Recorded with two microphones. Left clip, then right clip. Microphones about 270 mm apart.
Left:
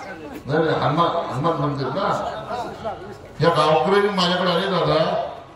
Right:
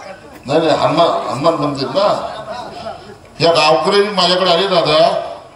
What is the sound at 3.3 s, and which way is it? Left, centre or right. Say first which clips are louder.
A man's voice: right 6 dB; right.